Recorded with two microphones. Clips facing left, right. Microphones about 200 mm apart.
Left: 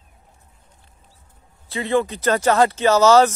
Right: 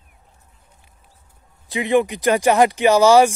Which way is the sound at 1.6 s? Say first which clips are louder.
Right 3 dB; 15° right (ahead or behind).